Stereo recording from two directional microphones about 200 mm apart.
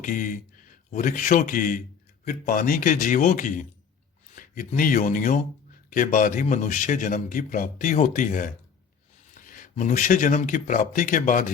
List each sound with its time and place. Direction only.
0.0 s a man's voice: 40° left (ahead or behind)